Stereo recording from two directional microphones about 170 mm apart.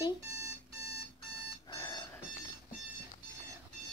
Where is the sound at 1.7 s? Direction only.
20° left (ahead or behind).